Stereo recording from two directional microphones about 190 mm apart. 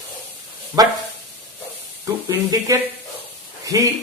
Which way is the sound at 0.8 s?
20° right (ahead or behind).